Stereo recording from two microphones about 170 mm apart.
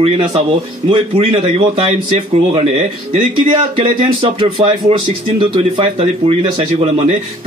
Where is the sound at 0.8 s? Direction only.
35° right (ahead or behind).